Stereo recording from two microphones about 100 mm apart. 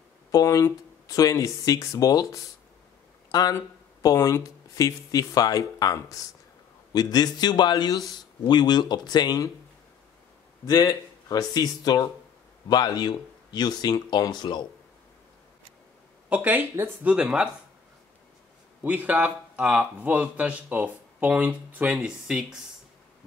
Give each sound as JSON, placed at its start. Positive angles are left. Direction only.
{"t": 0.3, "sound": "speech", "side_deg": 35}
{"t": 10.6, "sound": "speech", "side_deg": 35}
{"t": 16.3, "sound": "speech", "side_deg": -15}
{"t": 17.1, "sound": "speech", "side_deg": -10}
{"t": 18.8, "sound": "speech", "side_deg": -15}